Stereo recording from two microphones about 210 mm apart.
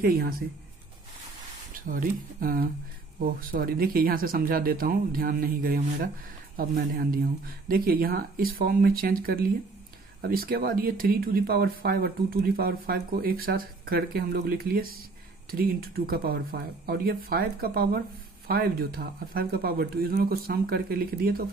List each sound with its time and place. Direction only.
0.0 s speech: 45° right (ahead or behind)
1.9 s speech: 40° right (ahead or behind)